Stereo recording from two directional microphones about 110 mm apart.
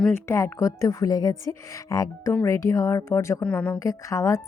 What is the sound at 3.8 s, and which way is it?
Speech, 30° left (ahead or behind).